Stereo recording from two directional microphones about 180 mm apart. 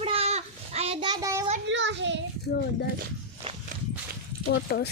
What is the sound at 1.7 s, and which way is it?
Child singing, 90° right.